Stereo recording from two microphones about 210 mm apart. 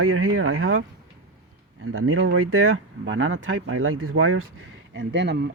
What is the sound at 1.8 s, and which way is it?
Speech, 80° right.